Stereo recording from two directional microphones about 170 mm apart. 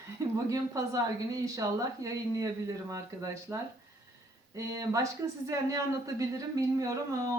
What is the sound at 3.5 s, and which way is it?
Speech, 10° right (ahead or behind).